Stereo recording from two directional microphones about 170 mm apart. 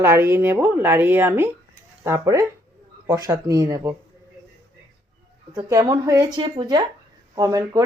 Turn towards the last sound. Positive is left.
turn(degrees=-20)  # may be behind; listen again after turning